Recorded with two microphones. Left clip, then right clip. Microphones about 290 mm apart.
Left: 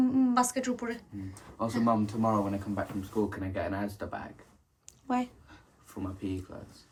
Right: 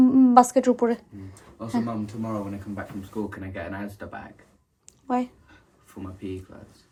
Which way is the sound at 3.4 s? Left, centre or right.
Centre.